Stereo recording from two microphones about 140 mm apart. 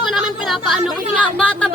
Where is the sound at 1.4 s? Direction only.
10° left (ahead or behind).